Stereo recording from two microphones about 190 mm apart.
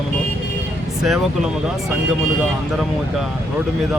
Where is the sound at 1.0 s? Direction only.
5° right (ahead or behind).